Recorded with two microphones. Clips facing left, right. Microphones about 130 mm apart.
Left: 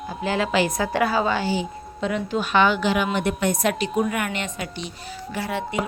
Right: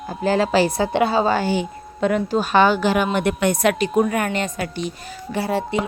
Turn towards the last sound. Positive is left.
turn(degrees=-35)  # may be behind; listen again after turning